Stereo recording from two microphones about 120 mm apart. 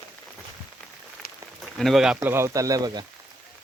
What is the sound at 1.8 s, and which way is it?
Speech, centre (ahead or behind).